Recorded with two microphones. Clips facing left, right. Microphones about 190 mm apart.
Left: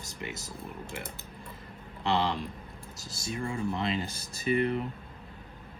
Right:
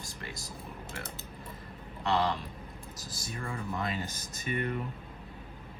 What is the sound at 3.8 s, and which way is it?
Speech, 30° left (ahead or behind).